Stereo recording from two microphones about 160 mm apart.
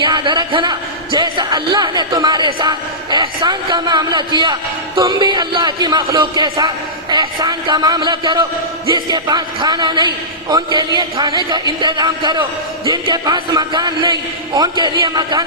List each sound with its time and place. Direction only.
0.0 s a man's voice: 30° right (ahead or behind)